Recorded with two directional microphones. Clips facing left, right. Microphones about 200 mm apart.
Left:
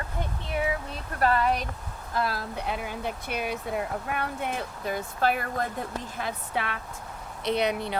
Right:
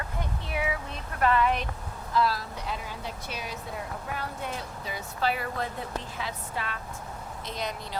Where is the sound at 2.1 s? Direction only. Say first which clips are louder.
Right 2 dB; 55° left (ahead or behind).